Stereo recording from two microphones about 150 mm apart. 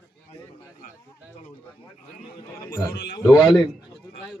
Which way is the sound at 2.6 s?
20° left (ahead or behind).